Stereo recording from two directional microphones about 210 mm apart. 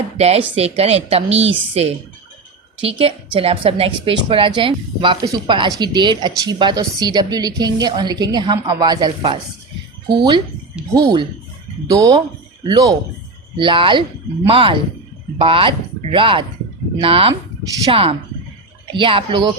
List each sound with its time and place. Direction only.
0.2 s a woman's voice: 30° right (ahead or behind)
3.3 s a woman's voice: 25° right (ahead or behind)
10.9 s a woman's voice: 20° right (ahead or behind)